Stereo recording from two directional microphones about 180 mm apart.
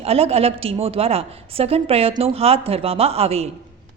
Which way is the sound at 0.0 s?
35° right (ahead or behind).